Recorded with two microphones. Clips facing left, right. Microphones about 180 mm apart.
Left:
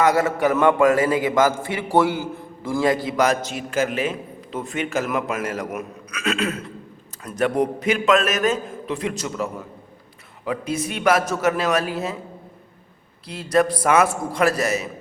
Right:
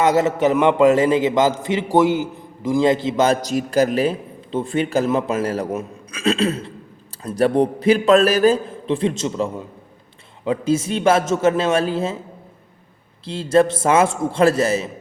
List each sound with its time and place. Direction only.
0.0 s a man's voice: 20° right (ahead or behind)
3.4 s a man's voice: 40° right (ahead or behind)
13.2 s a man's voice: 25° right (ahead or behind)